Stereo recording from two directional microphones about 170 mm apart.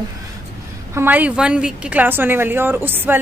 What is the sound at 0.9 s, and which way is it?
Speech, 10° right (ahead or behind).